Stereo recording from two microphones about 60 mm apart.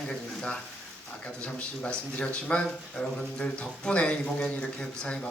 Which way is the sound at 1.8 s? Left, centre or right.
Centre.